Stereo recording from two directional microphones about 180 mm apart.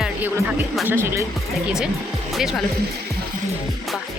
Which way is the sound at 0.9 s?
15° right (ahead or behind).